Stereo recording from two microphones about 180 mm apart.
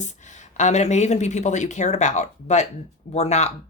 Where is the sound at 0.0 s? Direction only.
40° left (ahead or behind).